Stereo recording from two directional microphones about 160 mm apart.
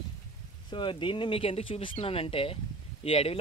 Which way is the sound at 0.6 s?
30° left (ahead or behind).